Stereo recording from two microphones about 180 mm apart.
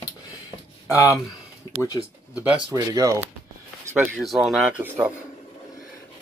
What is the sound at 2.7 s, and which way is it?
Speech, 20° right (ahead or behind).